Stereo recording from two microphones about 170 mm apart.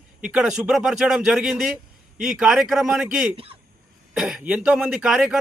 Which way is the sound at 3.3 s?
35° right (ahead or behind).